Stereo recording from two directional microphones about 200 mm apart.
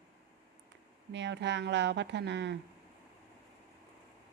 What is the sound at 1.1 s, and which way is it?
A woman's voice, 60° right (ahead or behind).